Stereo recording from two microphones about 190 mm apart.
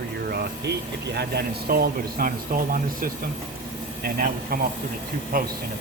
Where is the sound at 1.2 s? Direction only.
55° right (ahead or behind).